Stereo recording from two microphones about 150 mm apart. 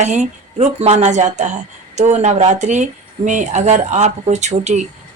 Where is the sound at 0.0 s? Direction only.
50° right (ahead or behind).